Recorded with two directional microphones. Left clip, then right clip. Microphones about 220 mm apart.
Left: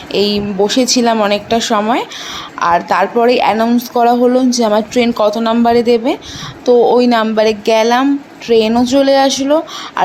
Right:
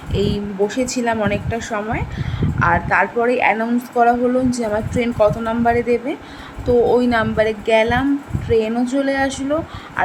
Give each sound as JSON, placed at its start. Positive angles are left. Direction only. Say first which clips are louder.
{"t": 0.1, "sound": "speech", "louder": "left 8 dB", "side_deg": 20}